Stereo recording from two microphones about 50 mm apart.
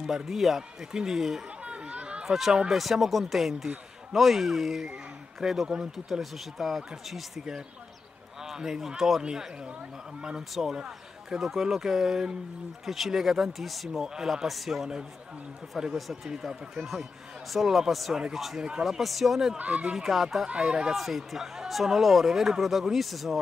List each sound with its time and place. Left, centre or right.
0.0 s speech: centre
1.6 s chatter: right
2.2 s speech: centre
10.5 s speech: centre
18.6 s speech: centre
19.6 s speech: right
20.0 s speech: centre
20.4 s speech: right
20.9 s speech: centre